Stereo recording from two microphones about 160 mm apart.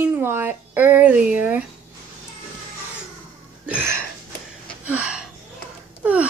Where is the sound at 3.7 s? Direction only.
10° right (ahead or behind).